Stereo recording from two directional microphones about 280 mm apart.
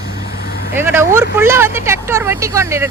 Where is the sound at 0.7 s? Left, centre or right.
Centre.